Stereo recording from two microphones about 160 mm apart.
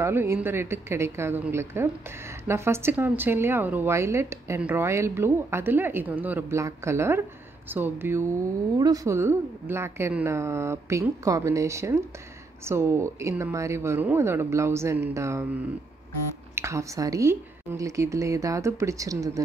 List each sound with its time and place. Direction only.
0.0 s a woman's voice: 15° right (ahead or behind)